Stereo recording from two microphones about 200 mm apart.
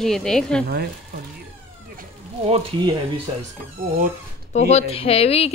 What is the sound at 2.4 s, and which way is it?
Speech, 30° right (ahead or behind).